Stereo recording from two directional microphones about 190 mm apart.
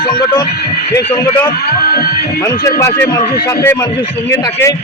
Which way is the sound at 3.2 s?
50° left (ahead or behind).